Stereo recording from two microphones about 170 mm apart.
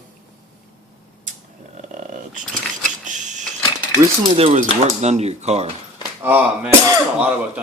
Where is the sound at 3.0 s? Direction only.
45° right (ahead or behind).